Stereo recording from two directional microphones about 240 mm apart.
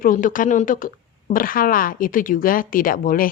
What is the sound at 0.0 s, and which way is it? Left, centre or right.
A woman's voice, left.